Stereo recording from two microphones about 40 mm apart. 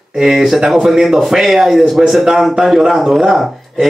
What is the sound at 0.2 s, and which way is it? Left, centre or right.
A woman's voice, centre.